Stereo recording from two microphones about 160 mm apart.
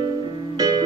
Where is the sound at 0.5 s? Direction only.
25° right (ahead or behind).